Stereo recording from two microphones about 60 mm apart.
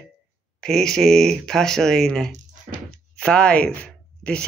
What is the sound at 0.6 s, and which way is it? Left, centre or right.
Speech, centre.